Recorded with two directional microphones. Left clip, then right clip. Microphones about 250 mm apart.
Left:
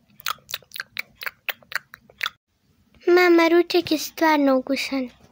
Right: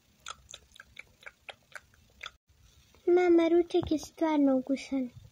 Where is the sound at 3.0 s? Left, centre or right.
Centre.